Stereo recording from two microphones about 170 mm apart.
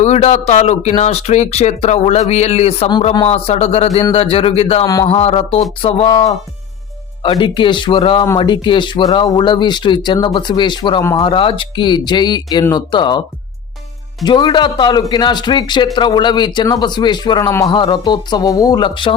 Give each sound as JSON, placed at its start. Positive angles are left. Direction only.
{"t": 0.0, "sound": "speech", "side_deg": 40}
{"t": 14.3, "sound": "speech", "side_deg": 25}